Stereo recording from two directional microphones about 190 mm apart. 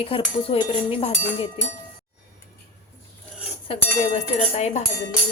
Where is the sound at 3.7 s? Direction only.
35° left (ahead or behind).